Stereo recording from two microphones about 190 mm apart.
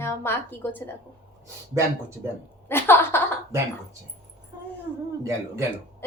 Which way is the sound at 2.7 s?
10° left (ahead or behind).